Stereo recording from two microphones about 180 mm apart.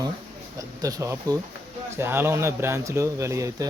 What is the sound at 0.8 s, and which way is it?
Speech, 20° right (ahead or behind).